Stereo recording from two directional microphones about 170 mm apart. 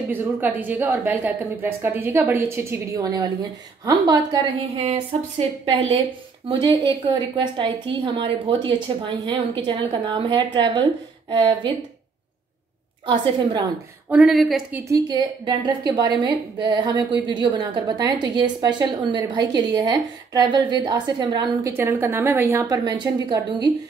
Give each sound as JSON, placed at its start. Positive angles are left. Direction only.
{"t": 0.1, "sound": "a woman's voice", "side_deg": -10}
{"t": 4.7, "sound": "speech", "side_deg": -40}
{"t": 6.5, "sound": "a woman's voice", "side_deg": -30}
{"t": 13.1, "sound": "a woman's voice", "side_deg": -25}
{"t": 14.0, "sound": "speech", "side_deg": -5}
{"t": 14.9, "sound": "a woman's voice", "side_deg": -25}
{"t": 21.7, "sound": "a woman's voice", "side_deg": -15}